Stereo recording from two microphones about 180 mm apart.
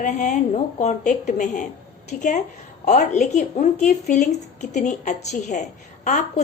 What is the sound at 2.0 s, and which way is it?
Speech, 45° left (ahead or behind).